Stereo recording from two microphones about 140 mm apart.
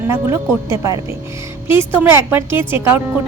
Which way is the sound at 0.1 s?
20° right (ahead or behind).